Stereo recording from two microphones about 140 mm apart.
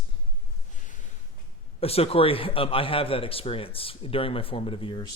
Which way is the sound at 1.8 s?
45° left (ahead or behind).